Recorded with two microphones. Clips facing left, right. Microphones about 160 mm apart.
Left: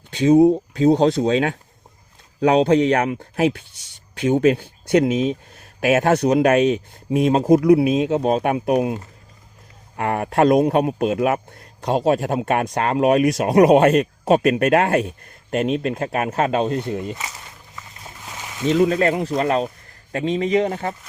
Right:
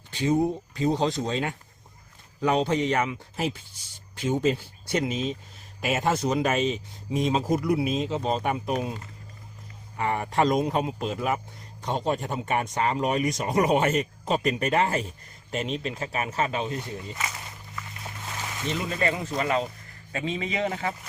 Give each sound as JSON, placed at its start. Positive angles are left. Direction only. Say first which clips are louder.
{"t": 0.2, "sound": "speech", "louder": "left 11 dB", "side_deg": 75}
{"t": 10.0, "sound": "speech", "louder": "left 6 dB", "side_deg": 65}
{"t": 18.7, "sound": "speech", "louder": "left 11 dB", "side_deg": 65}